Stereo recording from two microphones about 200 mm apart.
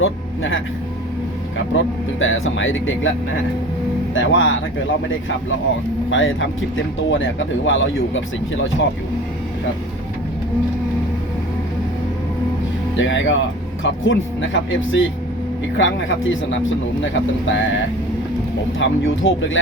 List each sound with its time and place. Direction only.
0.0 s speech: 75° left (ahead or behind)
1.7 s speech: 80° left
4.1 s speech: 70° left (ahead or behind)
6.1 s speech: 75° left (ahead or behind)
13.0 s speech: 70° left (ahead or behind)
18.8 s speech: 75° left (ahead or behind)